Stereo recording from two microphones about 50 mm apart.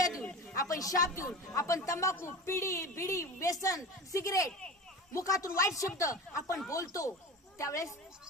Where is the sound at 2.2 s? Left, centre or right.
Left.